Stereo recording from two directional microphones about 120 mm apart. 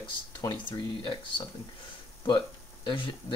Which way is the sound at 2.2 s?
45° left (ahead or behind).